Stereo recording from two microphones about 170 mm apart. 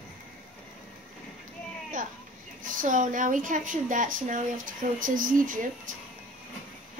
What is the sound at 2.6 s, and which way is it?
A woman's voice, 50° right (ahead or behind).